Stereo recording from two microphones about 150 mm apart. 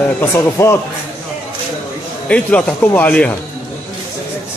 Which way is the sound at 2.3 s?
10° left (ahead or behind).